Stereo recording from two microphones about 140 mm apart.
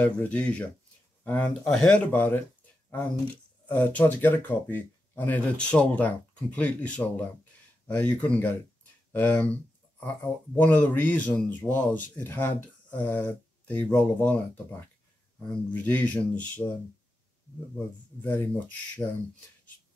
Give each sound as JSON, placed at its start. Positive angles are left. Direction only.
{"t": 0.0, "sound": "speech", "side_deg": 10}
{"t": 3.6, "sound": "speech", "side_deg": 10}
{"t": 17.7, "sound": "speech", "side_deg": 15}